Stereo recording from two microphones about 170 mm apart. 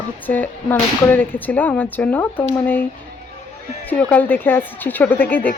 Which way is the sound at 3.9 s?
10° left (ahead or behind).